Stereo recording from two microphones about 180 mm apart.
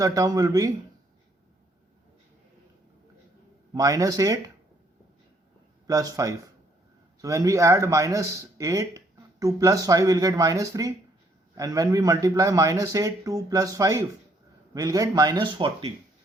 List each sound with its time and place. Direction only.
0.0 s a man's voice: 20° right (ahead or behind)
3.8 s a man's voice: 20° right (ahead or behind)
5.9 s a man's voice: 20° right (ahead or behind)